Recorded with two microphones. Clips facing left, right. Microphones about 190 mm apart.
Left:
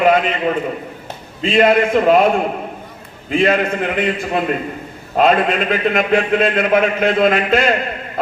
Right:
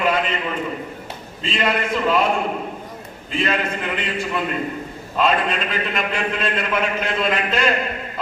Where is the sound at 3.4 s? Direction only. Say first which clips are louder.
Left 7 dB; 55° left (ahead or behind).